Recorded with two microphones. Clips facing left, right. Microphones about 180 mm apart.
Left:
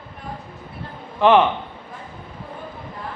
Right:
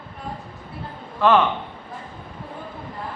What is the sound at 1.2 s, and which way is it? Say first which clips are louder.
Speech: left 3 dB; 15° left (ahead or behind).